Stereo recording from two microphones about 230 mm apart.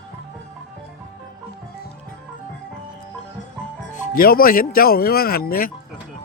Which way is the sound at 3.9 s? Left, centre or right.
Left.